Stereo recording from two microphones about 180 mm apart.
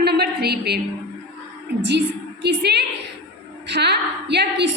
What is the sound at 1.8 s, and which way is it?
A woman's voice, 75° right (ahead or behind).